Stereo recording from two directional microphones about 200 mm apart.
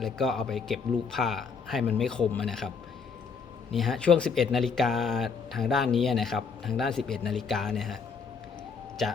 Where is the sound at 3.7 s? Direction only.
Centre (ahead or behind).